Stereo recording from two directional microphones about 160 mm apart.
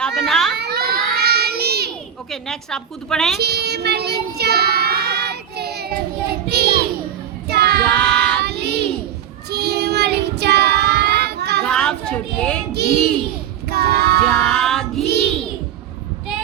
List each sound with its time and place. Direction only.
0.0 s children playing: centre (ahead or behind)
0.5 s child singing: 85° right
2.3 s a woman's voice: 5° left (ahead or behind)
3.3 s child singing: 90° right
7.9 s child singing: 5° left (ahead or behind)
8.4 s child singing: 90° right
11.6 s a sound: 5° left (ahead or behind)
13.7 s child singing: 90° right
14.3 s child singing: 5° left (ahead or behind)